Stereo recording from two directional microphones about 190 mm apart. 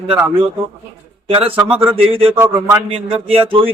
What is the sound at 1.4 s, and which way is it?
A man's voice, 30° right (ahead or behind).